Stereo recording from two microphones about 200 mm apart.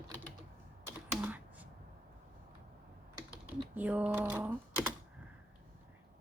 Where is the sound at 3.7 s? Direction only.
10° right (ahead or behind).